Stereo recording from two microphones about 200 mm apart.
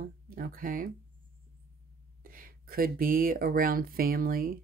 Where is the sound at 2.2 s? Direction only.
45° right (ahead or behind).